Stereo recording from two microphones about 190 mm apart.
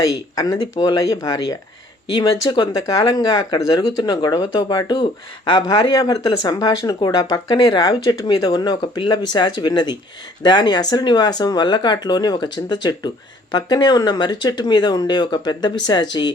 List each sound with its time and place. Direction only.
0.0 s speech: 20° left (ahead or behind)